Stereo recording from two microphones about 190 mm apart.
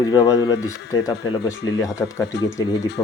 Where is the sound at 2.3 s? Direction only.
65° left (ahead or behind).